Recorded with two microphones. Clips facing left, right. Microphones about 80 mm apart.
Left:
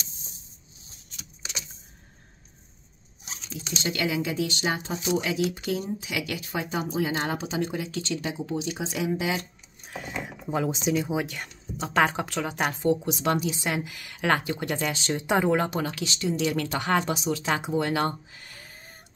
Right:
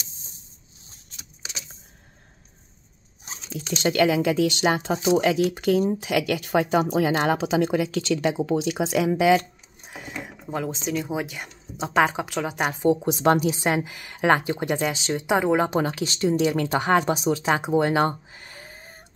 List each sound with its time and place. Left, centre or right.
3.3 s a sound: right
3.7 s speech: right
5.2 s speech: right
10.4 s a woman's voice: centre
12.9 s speech: right
13.7 s speech: right; by 15.6 s centre
15.7 s speech: right
17.1 s speech: right
17.4 s speech: right